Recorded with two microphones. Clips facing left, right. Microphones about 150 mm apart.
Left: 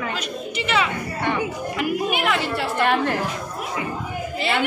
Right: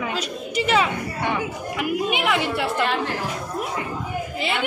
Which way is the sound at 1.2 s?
10° right (ahead or behind).